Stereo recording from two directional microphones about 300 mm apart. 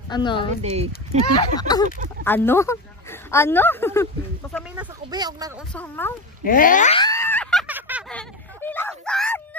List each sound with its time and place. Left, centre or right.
0.1 s speech: centre
0.6 s speech: right
1.6 s speech: centre
4.7 s speech: centre
5.8 s speech: centre
6.4 s a sound: left; by 7.6 s centre
7.6 s a sound: centre